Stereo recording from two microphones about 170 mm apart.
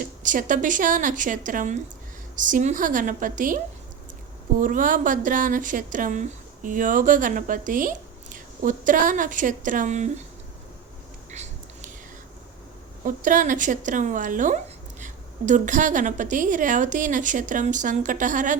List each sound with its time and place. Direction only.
0.0 s speech: 50° right (ahead or behind)
4.6 s speech: 50° right (ahead or behind)
13.1 s speech: 50° right (ahead or behind)